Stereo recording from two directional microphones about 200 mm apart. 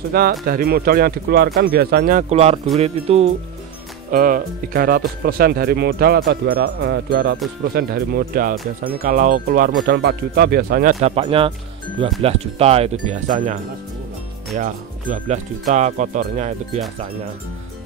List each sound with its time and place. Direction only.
0.1 s speech: 50° right (ahead or behind); by 3.3 s 30° right (ahead or behind)
4.1 s speech: 45° right (ahead or behind)
9.8 s speech: 55° right (ahead or behind); by 13.2 s 35° right (ahead or behind)
14.5 s speech: 35° right (ahead or behind)